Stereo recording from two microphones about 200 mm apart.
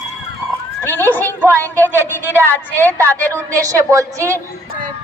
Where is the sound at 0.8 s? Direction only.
10° left (ahead or behind).